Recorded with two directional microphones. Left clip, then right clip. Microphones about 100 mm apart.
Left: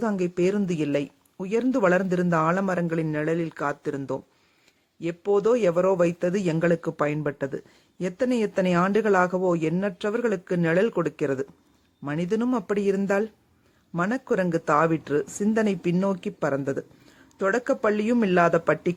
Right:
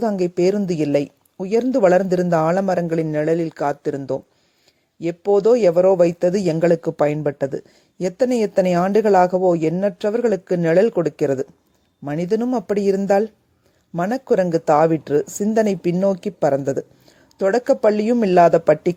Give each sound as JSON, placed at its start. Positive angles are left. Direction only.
{"t": 0.0, "sound": "speech", "side_deg": -35}